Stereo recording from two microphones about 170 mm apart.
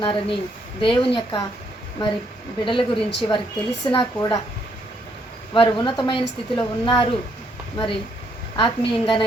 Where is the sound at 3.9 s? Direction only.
30° left (ahead or behind).